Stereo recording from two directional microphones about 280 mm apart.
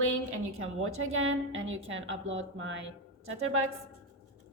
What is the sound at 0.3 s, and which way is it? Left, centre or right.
Speech, right.